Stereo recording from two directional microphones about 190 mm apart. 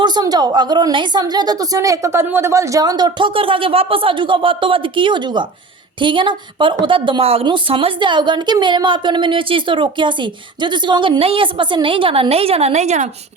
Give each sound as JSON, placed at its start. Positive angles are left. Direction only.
{"t": 0.0, "sound": "a woman's voice", "side_deg": -20}